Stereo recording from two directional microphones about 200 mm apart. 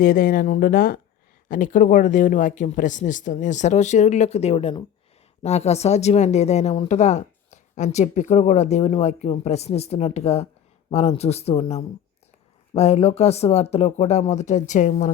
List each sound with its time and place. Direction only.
0.0 s speech: 45° left (ahead or behind)